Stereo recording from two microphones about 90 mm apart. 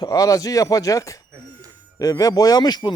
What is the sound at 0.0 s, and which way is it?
Speech, 40° left (ahead or behind).